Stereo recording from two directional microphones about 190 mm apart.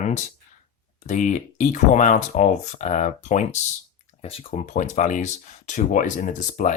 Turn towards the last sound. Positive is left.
turn(degrees=40)  # may be behind; listen again after turning